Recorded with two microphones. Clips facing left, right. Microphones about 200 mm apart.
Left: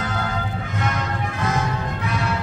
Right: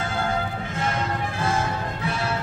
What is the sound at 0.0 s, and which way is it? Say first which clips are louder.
Music: even; 30° right (ahead or behind).